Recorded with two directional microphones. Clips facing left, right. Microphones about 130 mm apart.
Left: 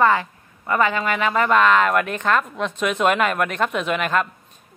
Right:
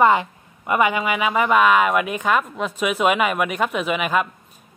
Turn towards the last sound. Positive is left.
turn(degrees=-5)  # may be behind; listen again after turning